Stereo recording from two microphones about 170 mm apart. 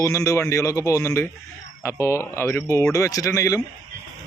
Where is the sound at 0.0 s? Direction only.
20° left (ahead or behind).